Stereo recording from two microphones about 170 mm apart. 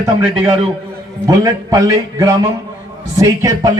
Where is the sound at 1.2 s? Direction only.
20° right (ahead or behind).